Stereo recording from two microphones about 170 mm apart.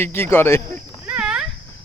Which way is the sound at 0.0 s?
15° left (ahead or behind).